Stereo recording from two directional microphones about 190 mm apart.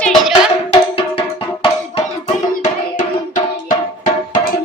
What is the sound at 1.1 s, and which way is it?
Music, 30° left (ahead or behind).